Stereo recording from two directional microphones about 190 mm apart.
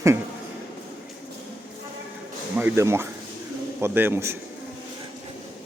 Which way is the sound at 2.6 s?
10° right (ahead or behind).